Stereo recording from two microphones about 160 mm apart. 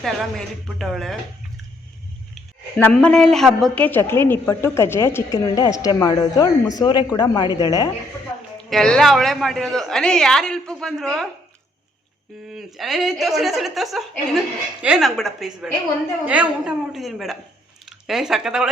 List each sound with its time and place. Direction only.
0.0 s a woman's voice: centre (ahead or behind)
2.7 s a woman's voice: 5° left (ahead or behind); by 7.9 s 25° left (ahead or behind)
8.7 s a woman's voice: 5° left (ahead or behind)
12.5 s a woman's voice: centre (ahead or behind)